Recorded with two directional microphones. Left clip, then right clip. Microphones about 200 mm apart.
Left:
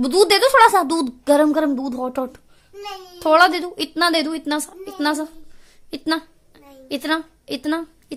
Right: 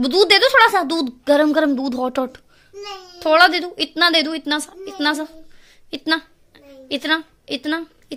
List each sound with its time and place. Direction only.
0.0 s speech: 15° left (ahead or behind)
3.2 s speech: 15° left (ahead or behind)
5.9 s a sound: 10° left (ahead or behind)